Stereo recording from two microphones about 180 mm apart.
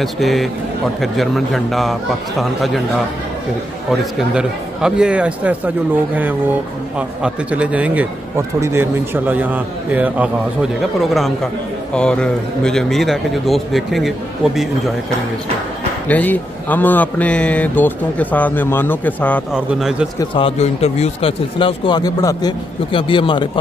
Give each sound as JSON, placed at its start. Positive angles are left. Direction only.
{"t": 0.0, "sound": "a man's voice", "side_deg": 0}
{"t": 4.0, "sound": "a man's voice", "side_deg": -5}
{"t": 7.0, "sound": "a man's voice", "side_deg": -5}
{"t": 16.1, "sound": "a man's voice", "side_deg": 10}
{"t": 19.5, "sound": "a man's voice", "side_deg": -5}
{"t": 20.3, "sound": "speech", "side_deg": 35}